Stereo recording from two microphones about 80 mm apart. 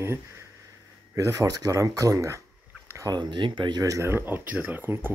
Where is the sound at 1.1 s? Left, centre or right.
Right.